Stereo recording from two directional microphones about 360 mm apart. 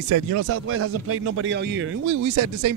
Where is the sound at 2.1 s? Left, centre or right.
Right.